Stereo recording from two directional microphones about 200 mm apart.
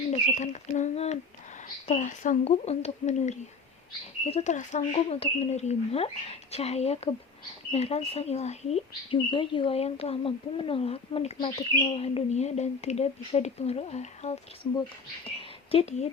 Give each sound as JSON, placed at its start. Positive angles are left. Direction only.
{"t": 0.1, "sound": "speech", "side_deg": 35}